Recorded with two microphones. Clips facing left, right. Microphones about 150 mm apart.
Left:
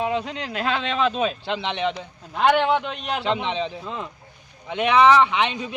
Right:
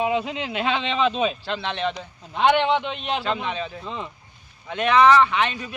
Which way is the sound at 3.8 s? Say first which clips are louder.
Left 1 dB; centre (ahead or behind).